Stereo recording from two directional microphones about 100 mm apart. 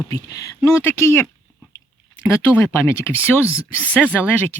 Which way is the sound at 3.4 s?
15° right (ahead or behind).